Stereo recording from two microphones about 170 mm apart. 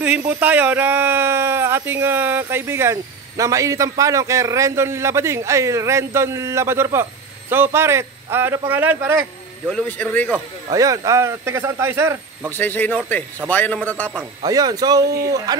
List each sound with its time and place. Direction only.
0.4 s speech: 10° right (ahead or behind)
9.7 s a man's voice: 5° left (ahead or behind)
10.7 s speech: 20° right (ahead or behind)
12.5 s a man's voice: 10° left (ahead or behind)
14.4 s speech: 20° right (ahead or behind)